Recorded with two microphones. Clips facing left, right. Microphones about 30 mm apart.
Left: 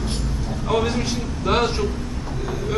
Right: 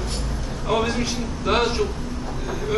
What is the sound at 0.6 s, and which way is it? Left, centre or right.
A man's voice, centre.